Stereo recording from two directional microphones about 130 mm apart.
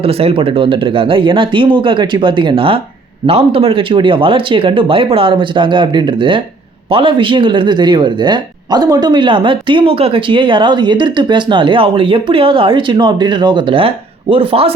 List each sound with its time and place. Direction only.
0.0 s speech: 50° right (ahead or behind)